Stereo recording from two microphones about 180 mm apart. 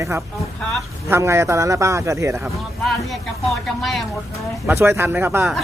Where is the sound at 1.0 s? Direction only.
15° right (ahead or behind).